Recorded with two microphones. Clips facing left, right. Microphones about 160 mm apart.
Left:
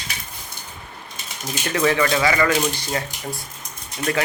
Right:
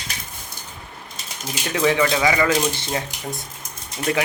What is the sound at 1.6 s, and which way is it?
A man's voice, 15° right (ahead or behind).